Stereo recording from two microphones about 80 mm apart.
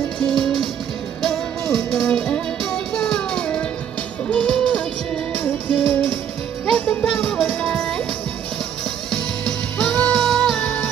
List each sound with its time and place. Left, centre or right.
0.2 s music: centre
5.4 s music: left
7.6 s music: centre
10.0 s music: centre